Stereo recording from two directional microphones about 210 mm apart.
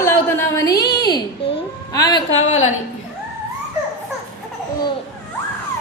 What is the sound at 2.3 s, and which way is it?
Speech, 70° left (ahead or behind).